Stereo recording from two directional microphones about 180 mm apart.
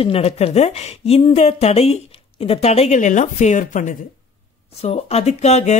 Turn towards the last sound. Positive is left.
turn(degrees=35)  # may be behind; listen again after turning